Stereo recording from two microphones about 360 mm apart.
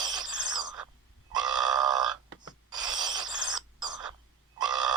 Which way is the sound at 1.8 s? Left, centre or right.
Centre.